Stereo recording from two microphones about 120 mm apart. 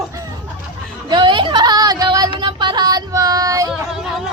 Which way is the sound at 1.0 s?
40° right (ahead or behind).